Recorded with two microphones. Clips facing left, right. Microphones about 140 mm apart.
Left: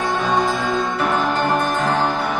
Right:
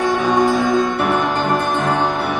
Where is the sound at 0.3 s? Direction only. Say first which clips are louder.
Right 5 dB; 65° right (ahead or behind).